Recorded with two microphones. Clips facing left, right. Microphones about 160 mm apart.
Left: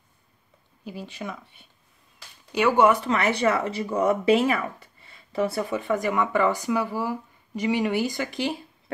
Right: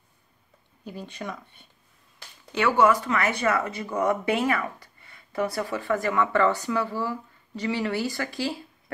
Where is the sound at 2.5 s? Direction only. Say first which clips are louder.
Left 2 dB; 15° left (ahead or behind).